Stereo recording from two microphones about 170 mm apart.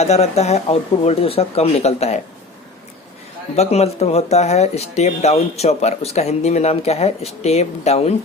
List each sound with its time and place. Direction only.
0.0 s speech: 40° left (ahead or behind)
3.5 s speech: 40° left (ahead or behind)